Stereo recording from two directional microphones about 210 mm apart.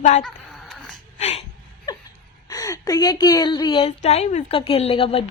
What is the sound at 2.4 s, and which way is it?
A woman's voice, 15° left (ahead or behind).